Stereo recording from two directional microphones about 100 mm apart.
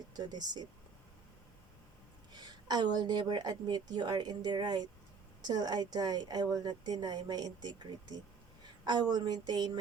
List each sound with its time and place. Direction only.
0.1 s a woman's voice: 45° right (ahead or behind)
2.6 s a woman's voice: 45° right (ahead or behind)